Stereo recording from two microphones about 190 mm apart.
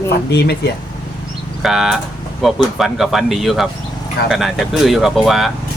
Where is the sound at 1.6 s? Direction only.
Centre (ahead or behind).